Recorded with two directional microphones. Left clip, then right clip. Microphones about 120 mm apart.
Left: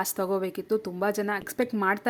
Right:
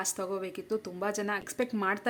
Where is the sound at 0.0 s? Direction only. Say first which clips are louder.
Left 6 dB; 40° left (ahead or behind).